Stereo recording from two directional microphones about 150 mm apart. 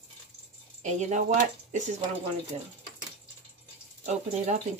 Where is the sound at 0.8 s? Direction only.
55° right (ahead or behind).